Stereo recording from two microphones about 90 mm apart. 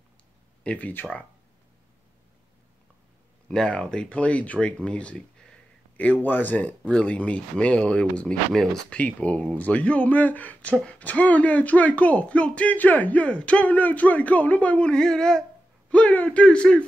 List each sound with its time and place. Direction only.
0.7 s speech: 15° left (ahead or behind)
3.4 s speech: 10° left (ahead or behind)
9.0 s speech: 15° left (ahead or behind)